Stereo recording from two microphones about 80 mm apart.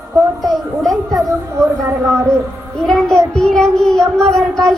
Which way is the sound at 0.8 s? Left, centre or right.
Centre.